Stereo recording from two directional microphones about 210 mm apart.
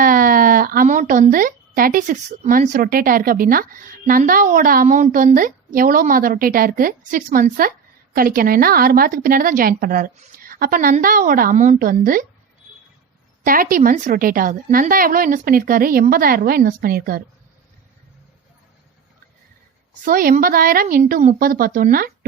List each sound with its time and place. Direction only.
0.0 s a woman's voice: 40° right (ahead or behind)
13.4 s a woman's voice: 40° right (ahead or behind)
20.1 s a woman's voice: 40° right (ahead or behind)